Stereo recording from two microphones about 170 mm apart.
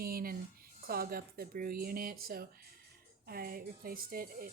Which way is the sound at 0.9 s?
60° right (ahead or behind).